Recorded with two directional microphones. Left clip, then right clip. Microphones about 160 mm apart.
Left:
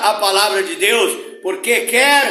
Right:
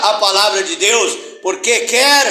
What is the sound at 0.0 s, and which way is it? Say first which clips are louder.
A man's voice: right 2 dB; 20° left (ahead or behind).